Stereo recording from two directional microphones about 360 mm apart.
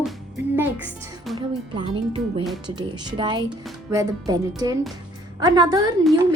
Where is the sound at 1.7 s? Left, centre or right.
Centre.